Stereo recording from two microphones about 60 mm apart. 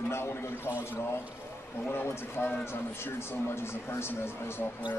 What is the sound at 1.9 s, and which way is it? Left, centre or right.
Speech, left.